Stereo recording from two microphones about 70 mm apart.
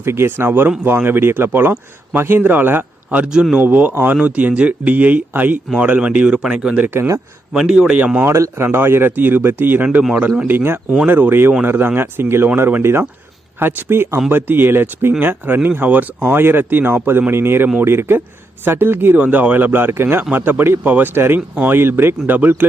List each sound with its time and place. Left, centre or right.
0.0 s speech: right; by 6.8 s centre
6.8 s speech: right
7.5 s speech: centre
8.3 s speech: right